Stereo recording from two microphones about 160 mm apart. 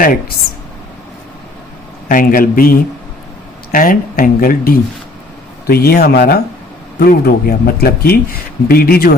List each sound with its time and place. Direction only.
0.0 s speech: 65° left (ahead or behind)
2.0 s speech: 60° left (ahead or behind)
5.6 s speech: 75° left (ahead or behind)